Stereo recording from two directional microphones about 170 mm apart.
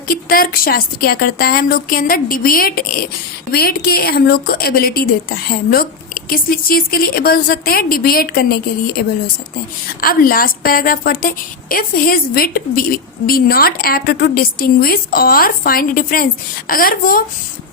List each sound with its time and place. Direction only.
0.1 s a woman's voice: 60° left (ahead or behind)
10.0 s a woman's voice: 60° left (ahead or behind)